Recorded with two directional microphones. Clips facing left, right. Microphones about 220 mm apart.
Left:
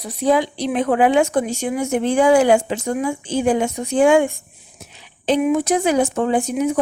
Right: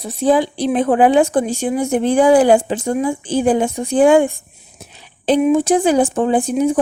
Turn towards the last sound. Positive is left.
turn(degrees=-30)  # may be behind; listen again after turning